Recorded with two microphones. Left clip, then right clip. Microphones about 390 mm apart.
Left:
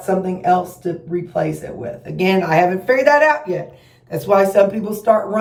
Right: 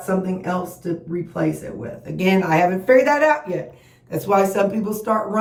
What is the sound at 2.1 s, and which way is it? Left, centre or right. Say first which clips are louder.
A woman's voice: left 3 dB; centre.